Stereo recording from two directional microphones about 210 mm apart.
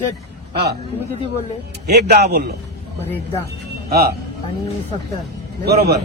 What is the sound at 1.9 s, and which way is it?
Speech, 50° right (ahead or behind).